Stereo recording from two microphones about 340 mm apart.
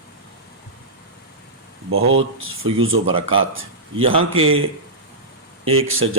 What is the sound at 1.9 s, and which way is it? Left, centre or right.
Speech, right.